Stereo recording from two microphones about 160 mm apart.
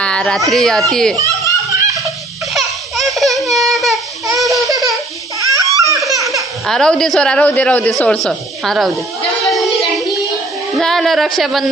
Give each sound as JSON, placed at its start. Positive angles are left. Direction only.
{"t": 0.0, "sound": "a sound", "side_deg": 5}
{"t": 0.5, "sound": "a man's voice", "side_deg": 0}
{"t": 1.5, "sound": "snicker", "side_deg": -20}
{"t": 2.5, "sound": "a sound", "side_deg": 0}
{"t": 4.6, "sound": "baby laughter", "side_deg": -20}
{"t": 5.4, "sound": "a sound", "side_deg": -20}
{"t": 5.9, "sound": "laughter", "side_deg": -20}
{"t": 6.6, "sound": "a man's voice", "side_deg": 5}
{"t": 9.5, "sound": "child singing", "side_deg": 0}
{"t": 10.8, "sound": "speech", "side_deg": 0}